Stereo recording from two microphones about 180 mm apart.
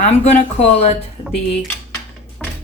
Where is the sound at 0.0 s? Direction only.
40° left (ahead or behind).